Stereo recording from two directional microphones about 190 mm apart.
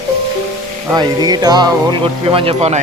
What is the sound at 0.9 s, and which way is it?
Speech, 20° right (ahead or behind).